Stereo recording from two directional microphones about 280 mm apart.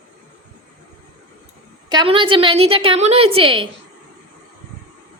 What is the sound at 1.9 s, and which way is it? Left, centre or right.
A woman's voice, centre.